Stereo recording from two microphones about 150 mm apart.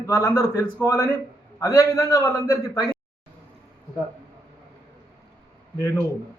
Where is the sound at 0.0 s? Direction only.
20° left (ahead or behind).